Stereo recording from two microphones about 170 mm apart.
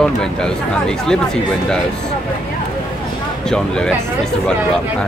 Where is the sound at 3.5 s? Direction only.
5° left (ahead or behind).